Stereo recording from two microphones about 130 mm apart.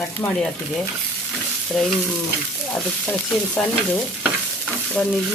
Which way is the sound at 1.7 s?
Centre (ahead or behind).